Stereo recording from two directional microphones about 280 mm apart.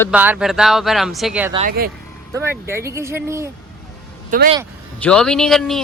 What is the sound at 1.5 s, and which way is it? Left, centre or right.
Speech, right.